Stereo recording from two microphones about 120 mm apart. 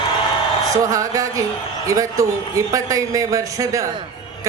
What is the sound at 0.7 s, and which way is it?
Speech, 25° right (ahead or behind).